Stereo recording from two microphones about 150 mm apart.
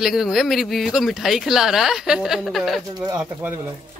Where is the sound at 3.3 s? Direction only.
15° right (ahead or behind).